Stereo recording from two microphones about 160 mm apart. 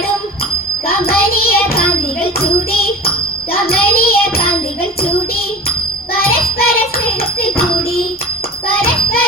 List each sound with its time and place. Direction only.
0.9 s a sound: 70° left (ahead or behind)
3.5 s child singing: 70° left (ahead or behind)
6.1 s child singing: 70° left (ahead or behind)
8.6 s music: 70° left (ahead or behind)